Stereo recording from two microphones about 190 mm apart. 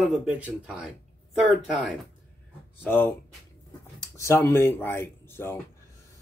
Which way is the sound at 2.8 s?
10° left (ahead or behind).